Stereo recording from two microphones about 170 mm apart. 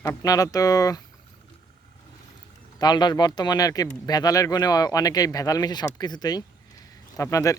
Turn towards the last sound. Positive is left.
turn(degrees=20)  # may be behind; listen again after turning